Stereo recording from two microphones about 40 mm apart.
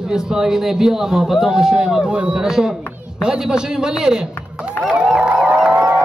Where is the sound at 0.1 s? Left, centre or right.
Centre.